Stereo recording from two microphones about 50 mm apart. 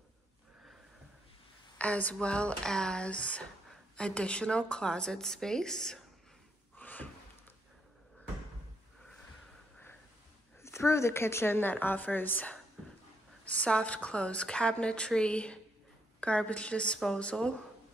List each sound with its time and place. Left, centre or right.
1.8 s a woman's voice: left; by 6.0 s centre
6.8 s a sound: left
10.6 s a woman's voice: left
13.5 s a woman's voice: left